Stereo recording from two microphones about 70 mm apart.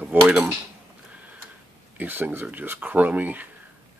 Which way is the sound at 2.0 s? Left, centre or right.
Right.